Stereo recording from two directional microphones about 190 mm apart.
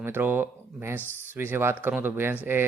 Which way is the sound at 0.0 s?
10° right (ahead or behind).